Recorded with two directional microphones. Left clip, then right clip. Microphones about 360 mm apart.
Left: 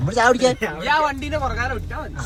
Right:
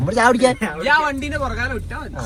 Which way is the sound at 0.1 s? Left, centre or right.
Centre.